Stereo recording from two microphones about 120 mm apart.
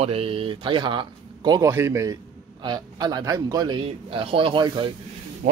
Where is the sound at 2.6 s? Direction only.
40° right (ahead or behind).